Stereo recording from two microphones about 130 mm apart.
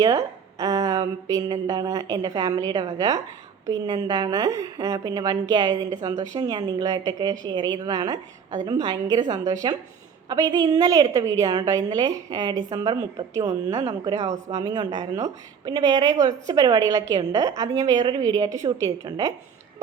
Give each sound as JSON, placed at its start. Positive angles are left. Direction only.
{"t": 0.0, "sound": "a woman's voice", "side_deg": -25}
{"t": 13.5, "sound": "a woman's voice", "side_deg": -60}
{"t": 13.8, "sound": "a woman's voice", "side_deg": -30}
{"t": 14.2, "sound": "a woman's voice", "side_deg": -65}
{"t": 14.5, "sound": "a woman's voice", "side_deg": -30}